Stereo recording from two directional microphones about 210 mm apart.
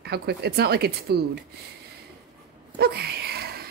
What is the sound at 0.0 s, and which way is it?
Speech, 50° right (ahead or behind).